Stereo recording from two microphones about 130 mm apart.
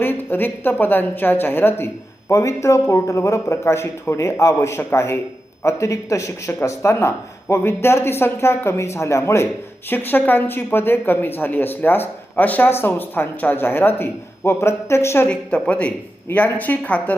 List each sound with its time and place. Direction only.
0.0 s speech: 15° left (ahead or behind)
15.3 s speech: 10° left (ahead or behind)